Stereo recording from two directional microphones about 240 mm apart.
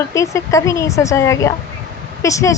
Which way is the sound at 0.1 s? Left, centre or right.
Centre.